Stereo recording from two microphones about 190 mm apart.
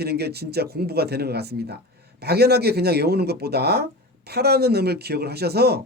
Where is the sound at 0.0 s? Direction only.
60° right (ahead or behind).